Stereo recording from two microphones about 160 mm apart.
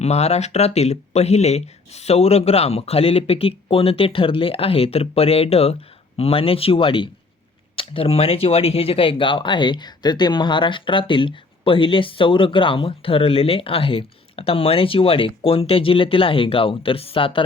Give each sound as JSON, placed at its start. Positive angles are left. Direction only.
{"t": 0.0, "sound": "speech", "side_deg": 40}